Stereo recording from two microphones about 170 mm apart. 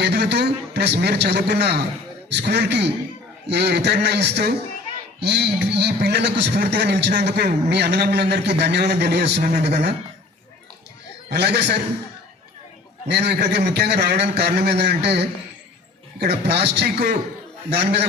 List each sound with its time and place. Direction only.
0.0 s a man's voice: 80° right
11.3 s a man's voice: 75° right (ahead or behind)
13.1 s a man's voice: 75° right (ahead or behind)